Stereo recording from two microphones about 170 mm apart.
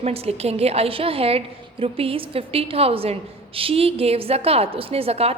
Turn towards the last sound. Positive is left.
turn(degrees=-35)  # may be behind; listen again after turning